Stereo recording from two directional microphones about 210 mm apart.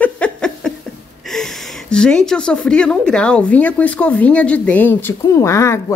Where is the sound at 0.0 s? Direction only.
5° left (ahead or behind).